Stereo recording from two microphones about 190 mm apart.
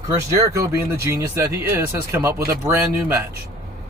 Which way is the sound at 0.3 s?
15° right (ahead or behind).